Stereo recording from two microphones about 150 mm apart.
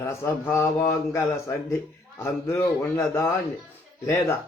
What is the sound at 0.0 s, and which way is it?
Mantra, 15° left (ahead or behind).